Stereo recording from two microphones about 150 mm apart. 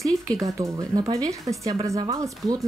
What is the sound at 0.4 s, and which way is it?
A woman's voice, 20° right (ahead or behind).